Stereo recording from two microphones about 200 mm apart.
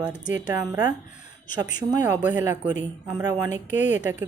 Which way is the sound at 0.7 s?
10° right (ahead or behind).